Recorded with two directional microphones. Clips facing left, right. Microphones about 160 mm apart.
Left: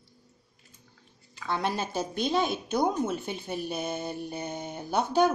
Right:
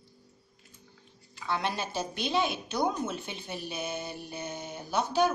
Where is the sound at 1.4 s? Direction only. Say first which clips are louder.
Left 2 dB; 45° left (ahead or behind).